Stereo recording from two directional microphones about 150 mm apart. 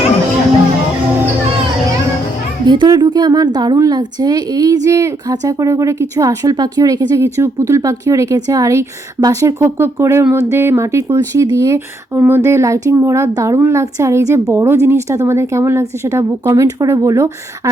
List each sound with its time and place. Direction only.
2.6 s speech: 30° right (ahead or behind)